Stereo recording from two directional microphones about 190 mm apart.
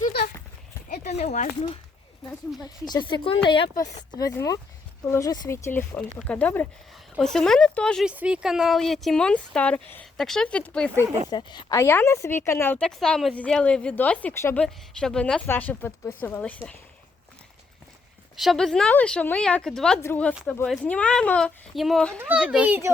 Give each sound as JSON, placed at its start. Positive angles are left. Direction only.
{"t": 1.0, "sound": "speech", "side_deg": 35}
{"t": 2.6, "sound": "a woman's voice", "side_deg": 20}
{"t": 11.3, "sound": "a woman's voice", "side_deg": 25}
{"t": 18.3, "sound": "a woman's voice", "side_deg": 0}
{"t": 22.2, "sound": "a child's voice", "side_deg": -5}